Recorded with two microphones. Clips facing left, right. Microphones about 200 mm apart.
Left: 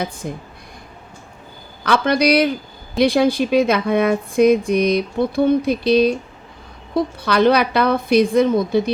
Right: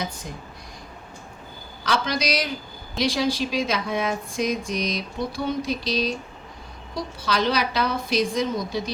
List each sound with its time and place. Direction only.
0.0 s speech: 55° left (ahead or behind)
1.8 s speech: 60° left (ahead or behind)